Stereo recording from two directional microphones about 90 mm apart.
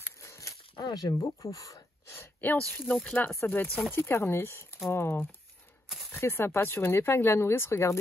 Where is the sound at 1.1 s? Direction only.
35° left (ahead or behind).